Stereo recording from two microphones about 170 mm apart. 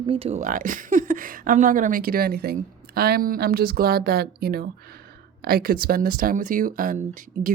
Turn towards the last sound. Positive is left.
turn(degrees=-50)  # may be behind; listen again after turning